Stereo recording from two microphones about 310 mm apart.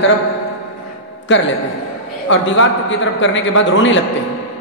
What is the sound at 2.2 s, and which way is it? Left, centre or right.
A man's voice, left.